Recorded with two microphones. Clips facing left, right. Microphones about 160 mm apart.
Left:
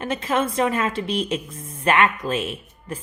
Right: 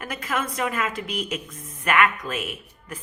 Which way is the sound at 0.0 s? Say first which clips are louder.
Left 6 dB; 25° left (ahead or behind).